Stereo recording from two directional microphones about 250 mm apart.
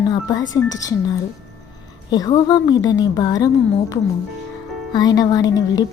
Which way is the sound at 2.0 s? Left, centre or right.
Centre.